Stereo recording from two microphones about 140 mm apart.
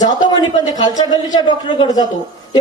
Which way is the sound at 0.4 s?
30° left (ahead or behind).